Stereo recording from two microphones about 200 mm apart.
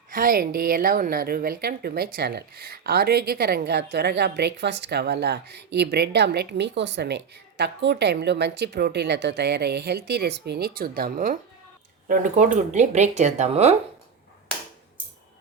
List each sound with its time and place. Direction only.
0.1 s speech: 45° right (ahead or behind)